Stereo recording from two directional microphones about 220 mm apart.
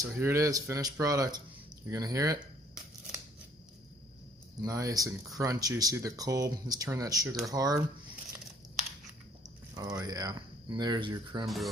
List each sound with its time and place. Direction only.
0.0 s speech: 10° right (ahead or behind)
4.6 s speech: 15° right (ahead or behind)
9.7 s speech: 15° right (ahead or behind)
11.4 s speech: centre (ahead or behind)